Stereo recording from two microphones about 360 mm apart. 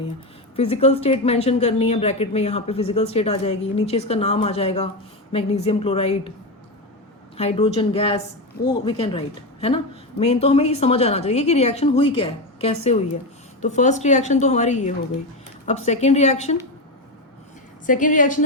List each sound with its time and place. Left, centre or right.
0.5 s speech: centre
7.3 s a woman's voice: centre
17.8 s a woman's voice: left